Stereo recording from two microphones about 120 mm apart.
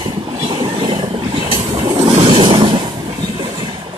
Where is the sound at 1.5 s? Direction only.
55° right (ahead or behind).